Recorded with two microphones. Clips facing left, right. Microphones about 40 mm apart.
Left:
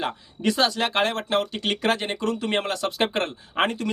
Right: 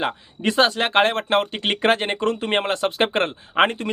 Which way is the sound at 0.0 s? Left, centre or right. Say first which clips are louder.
Right 2 dB; right.